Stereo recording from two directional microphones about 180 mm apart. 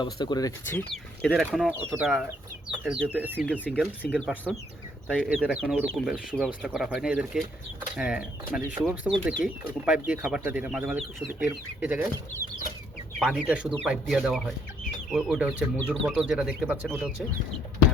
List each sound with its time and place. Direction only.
0.0 s speech: 25° left (ahead or behind)
1.3 s speech: centre (ahead or behind)
3.6 s speech: 5° left (ahead or behind)
13.1 s speech: 5° right (ahead or behind)